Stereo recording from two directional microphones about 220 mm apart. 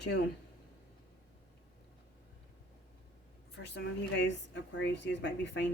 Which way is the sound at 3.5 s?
50° left (ahead or behind).